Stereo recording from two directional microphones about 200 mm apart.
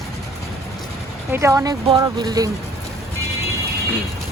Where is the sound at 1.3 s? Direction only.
15° right (ahead or behind).